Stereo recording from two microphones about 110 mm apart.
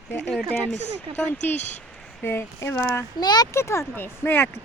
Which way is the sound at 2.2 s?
20° left (ahead or behind).